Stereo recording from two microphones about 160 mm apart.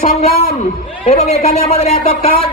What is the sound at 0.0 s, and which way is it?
Speech, 40° left (ahead or behind).